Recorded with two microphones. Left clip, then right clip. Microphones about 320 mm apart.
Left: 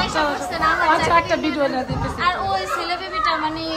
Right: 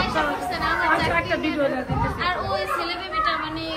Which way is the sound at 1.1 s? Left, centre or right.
Centre.